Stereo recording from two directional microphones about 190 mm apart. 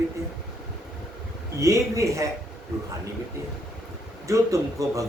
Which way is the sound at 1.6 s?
15° right (ahead or behind).